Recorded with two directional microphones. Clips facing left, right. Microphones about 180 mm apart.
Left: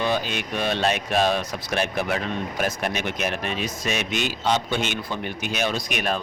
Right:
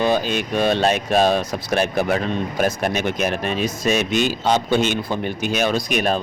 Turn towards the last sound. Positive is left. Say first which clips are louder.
# right 6 dB
turn(degrees=-40)  # may be behind; listen again after turning